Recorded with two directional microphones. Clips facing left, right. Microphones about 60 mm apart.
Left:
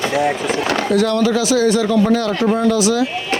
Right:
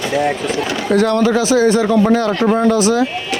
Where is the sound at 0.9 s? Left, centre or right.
Right.